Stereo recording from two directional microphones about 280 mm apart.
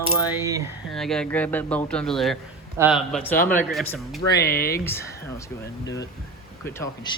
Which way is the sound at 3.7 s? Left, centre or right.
Centre.